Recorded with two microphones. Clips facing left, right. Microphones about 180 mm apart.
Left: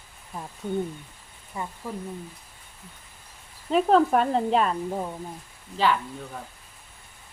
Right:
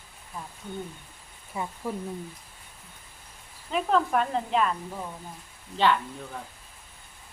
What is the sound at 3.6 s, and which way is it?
Speech, 35° left (ahead or behind).